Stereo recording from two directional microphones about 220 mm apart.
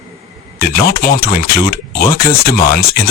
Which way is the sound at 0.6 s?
45° left (ahead or behind).